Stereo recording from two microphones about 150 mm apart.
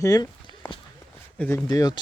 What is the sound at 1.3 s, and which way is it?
Speech, 15° left (ahead or behind).